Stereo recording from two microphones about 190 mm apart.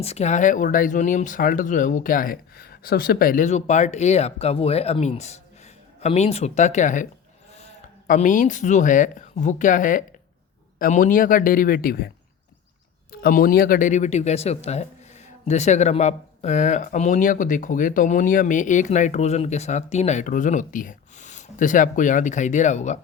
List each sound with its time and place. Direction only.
0.0 s a man's voice: 35° left (ahead or behind)